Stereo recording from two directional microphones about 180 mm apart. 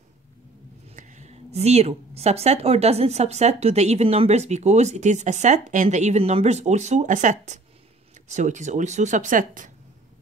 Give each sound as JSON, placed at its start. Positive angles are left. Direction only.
{"t": 0.8, "sound": "speech", "side_deg": -40}